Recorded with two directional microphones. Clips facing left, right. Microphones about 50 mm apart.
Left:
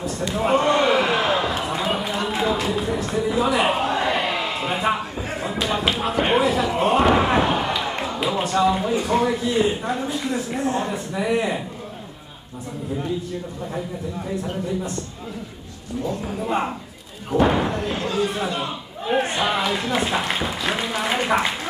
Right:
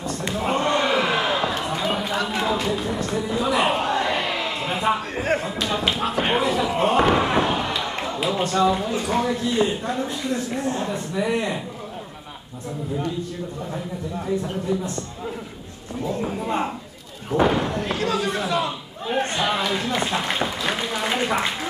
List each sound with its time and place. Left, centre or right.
0.3 s slam: centre
2.4 s a sound: centre
5.1 s slam: right
5.4 s speech: centre
16.4 s speech: centre
17.5 s slam: centre
18.1 s speech: centre